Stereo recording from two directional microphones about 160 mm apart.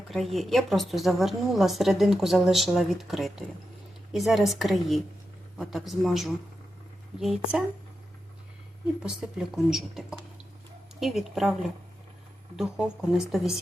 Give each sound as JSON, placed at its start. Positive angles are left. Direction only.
{"t": 0.1, "sound": "a woman's voice", "side_deg": 0}
{"t": 9.6, "sound": "a woman's voice", "side_deg": 0}
{"t": 12.5, "sound": "a woman's voice", "side_deg": -5}